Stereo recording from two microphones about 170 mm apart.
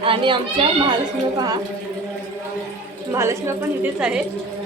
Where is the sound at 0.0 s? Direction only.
30° right (ahead or behind).